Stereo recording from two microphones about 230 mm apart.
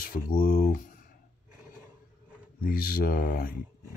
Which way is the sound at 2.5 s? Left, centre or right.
Left.